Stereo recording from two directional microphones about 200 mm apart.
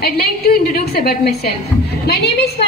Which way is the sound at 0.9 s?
50° left (ahead or behind).